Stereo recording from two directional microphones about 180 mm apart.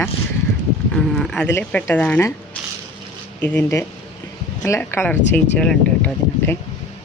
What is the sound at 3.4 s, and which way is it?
Speech, 10° left (ahead or behind).